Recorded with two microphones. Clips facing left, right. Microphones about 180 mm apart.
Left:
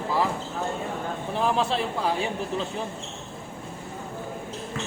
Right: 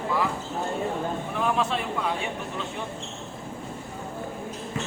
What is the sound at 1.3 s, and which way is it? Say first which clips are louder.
Speech: left 3 dB; 30° left (ahead or behind).